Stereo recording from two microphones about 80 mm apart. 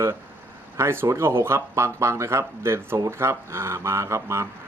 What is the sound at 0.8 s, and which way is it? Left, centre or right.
Speech, right.